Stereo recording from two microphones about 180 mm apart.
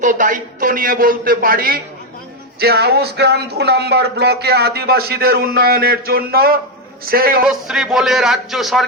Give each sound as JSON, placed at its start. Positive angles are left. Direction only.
{"t": 0.0, "sound": "a man's voice", "side_deg": -45}
{"t": 7.4, "sound": "a man's voice", "side_deg": -5}